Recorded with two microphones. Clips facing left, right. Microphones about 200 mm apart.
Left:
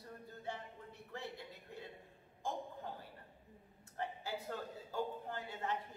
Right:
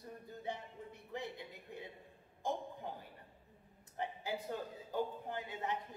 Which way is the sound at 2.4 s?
15° right (ahead or behind).